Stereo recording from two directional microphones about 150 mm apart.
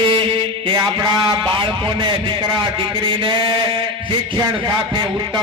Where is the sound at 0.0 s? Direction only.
35° right (ahead or behind).